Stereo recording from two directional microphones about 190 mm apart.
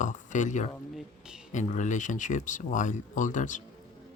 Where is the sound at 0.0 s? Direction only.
40° left (ahead or behind).